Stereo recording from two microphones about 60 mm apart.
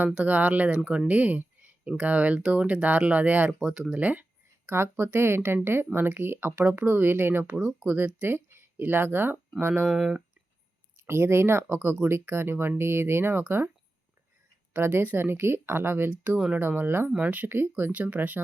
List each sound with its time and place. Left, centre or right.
0.1 s speech: right
4.0 s speech: right
4.6 s speech: right
9.9 s speech: centre
10.9 s speech: right
14.7 s a woman's voice: right
17.2 s speech: right
17.5 s speech: right